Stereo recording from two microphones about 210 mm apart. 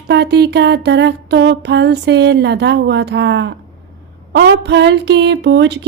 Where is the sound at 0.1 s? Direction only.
50° right (ahead or behind).